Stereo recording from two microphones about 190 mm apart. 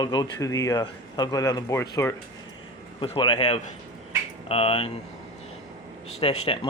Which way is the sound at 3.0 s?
25° left (ahead or behind).